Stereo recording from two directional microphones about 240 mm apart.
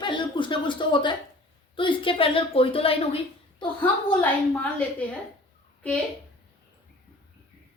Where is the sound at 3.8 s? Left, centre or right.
Centre.